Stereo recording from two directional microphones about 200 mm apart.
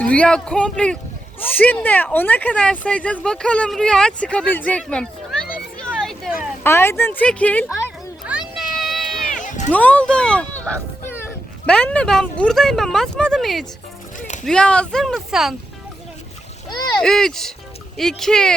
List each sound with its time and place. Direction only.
0.0 s speech: 5° left (ahead or behind)
5.8 s a sound: centre (ahead or behind)
6.6 s speech: 10° left (ahead or behind)
8.3 s a sound: centre (ahead or behind)
9.3 s cat: 40° left (ahead or behind)
9.7 s speech: 5° left (ahead or behind)
17.0 s speech: centre (ahead or behind)